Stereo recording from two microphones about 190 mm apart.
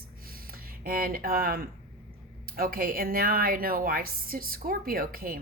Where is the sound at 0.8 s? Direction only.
50° right (ahead or behind).